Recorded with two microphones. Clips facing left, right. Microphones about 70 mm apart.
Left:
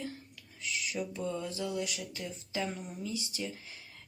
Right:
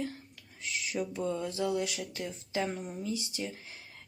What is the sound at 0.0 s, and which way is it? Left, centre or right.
Whispering, right.